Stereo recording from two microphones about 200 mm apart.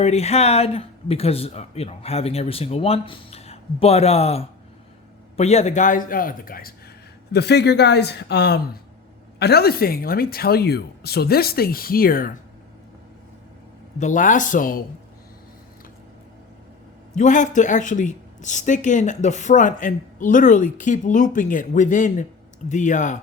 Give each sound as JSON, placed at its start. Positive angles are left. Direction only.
{"t": 0.0, "sound": "speech", "side_deg": 30}
{"t": 7.3, "sound": "speech", "side_deg": 55}
{"t": 14.0, "sound": "speech", "side_deg": 40}
{"t": 17.2, "sound": "speech", "side_deg": 40}